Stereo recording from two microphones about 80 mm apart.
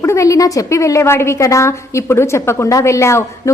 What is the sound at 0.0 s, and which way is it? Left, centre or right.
A woman's voice, left.